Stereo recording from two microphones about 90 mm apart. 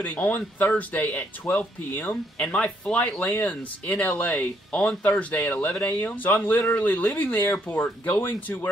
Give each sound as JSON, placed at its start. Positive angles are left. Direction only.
{"t": 0.0, "sound": "speech", "side_deg": 20}